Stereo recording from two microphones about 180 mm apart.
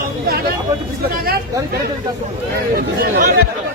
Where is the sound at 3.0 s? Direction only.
55° right (ahead or behind).